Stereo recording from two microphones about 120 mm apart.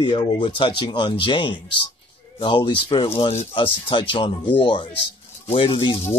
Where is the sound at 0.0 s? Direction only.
45° left (ahead or behind).